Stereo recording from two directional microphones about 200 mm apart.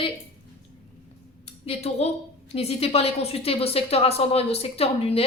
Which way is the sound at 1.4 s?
30° left (ahead or behind).